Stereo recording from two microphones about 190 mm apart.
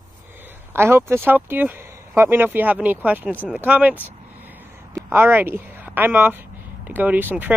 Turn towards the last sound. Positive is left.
turn(degrees=-10)  # may be behind; listen again after turning